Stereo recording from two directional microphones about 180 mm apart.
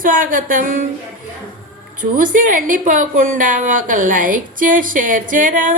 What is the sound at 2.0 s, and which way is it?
A woman's voice, 50° right (ahead or behind).